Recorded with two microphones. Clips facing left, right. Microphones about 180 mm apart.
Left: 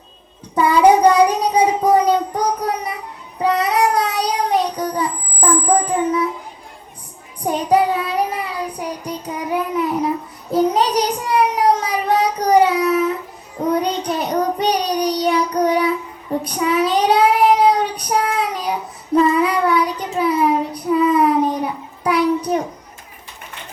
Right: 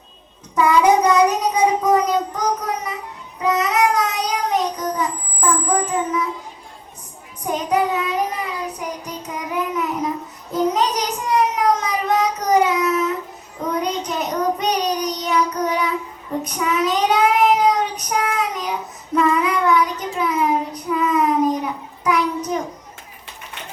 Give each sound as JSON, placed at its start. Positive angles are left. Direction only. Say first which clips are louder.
{"t": 0.5, "sound": "child singing", "louder": "left 2 dB", "side_deg": 30}
{"t": 7.4, "sound": "child singing", "louder": "left 4 dB", "side_deg": 30}